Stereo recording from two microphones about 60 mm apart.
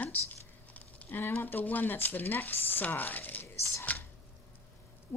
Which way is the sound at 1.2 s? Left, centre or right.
Left.